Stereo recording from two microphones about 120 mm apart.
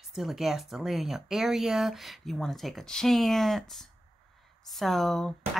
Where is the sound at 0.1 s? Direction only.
Centre (ahead or behind).